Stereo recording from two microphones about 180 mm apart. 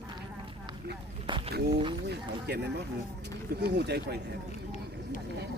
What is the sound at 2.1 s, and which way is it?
Speech, 65° right (ahead or behind).